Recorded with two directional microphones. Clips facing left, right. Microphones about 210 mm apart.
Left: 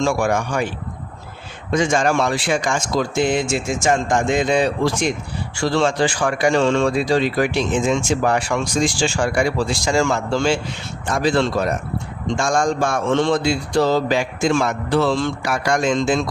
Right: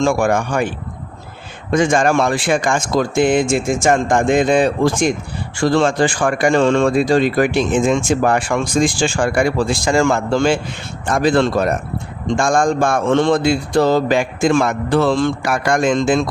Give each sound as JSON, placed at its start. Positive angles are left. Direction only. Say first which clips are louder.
{"t": 0.0, "sound": "speech", "louder": "right 3 dB", "side_deg": -50}
{"t": 1.7, "sound": "speech", "louder": "right 3 dB", "side_deg": -55}